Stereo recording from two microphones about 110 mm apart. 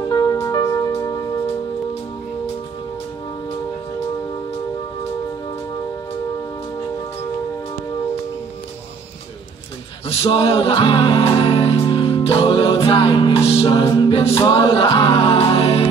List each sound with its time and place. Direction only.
0.1 s music: 35° left (ahead or behind)
10.0 s music: 55° left (ahead or behind)
14.2 s music: 55° left (ahead or behind)